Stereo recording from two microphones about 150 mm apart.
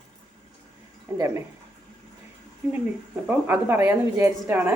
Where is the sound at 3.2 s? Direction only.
10° right (ahead or behind).